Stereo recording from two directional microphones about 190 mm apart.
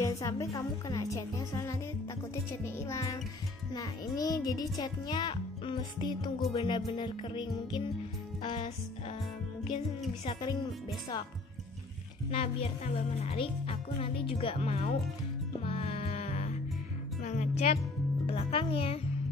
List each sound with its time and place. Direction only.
0.0 s a child's voice: 15° left (ahead or behind)
10.2 s a child's voice: 25° left (ahead or behind)
12.3 s speech: 30° left (ahead or behind)
15.6 s music: 30° left (ahead or behind)
18.2 s speech: 30° left (ahead or behind)